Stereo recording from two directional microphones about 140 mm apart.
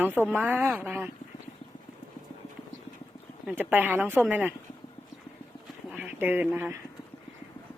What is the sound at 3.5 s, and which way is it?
A woman's voice, 15° right (ahead or behind).